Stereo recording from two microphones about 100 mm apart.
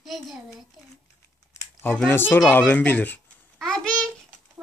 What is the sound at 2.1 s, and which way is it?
A child's voice, 20° left (ahead or behind).